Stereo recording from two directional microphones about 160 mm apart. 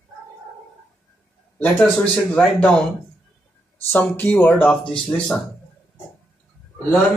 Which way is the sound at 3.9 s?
10° left (ahead or behind).